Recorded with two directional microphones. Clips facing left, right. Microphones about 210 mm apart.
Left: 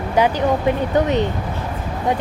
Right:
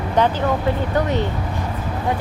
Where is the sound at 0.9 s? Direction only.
20° left (ahead or behind).